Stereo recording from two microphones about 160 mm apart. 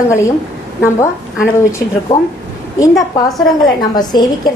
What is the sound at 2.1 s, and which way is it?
Speech, 30° left (ahead or behind).